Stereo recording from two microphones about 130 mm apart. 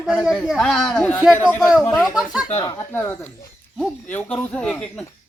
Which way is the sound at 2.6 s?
20° left (ahead or behind).